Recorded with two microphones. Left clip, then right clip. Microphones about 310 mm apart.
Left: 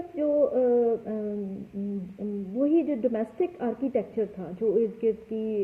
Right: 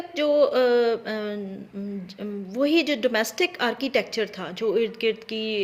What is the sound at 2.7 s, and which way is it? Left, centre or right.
Speech, right.